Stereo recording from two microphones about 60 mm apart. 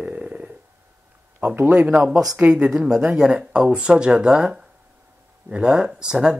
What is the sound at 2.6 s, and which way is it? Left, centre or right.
Speech, centre.